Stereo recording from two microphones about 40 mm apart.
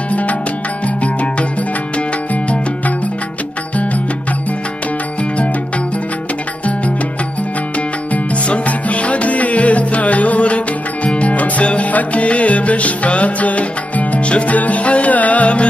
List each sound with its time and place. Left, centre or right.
0.1 s music: left
8.1 s music: left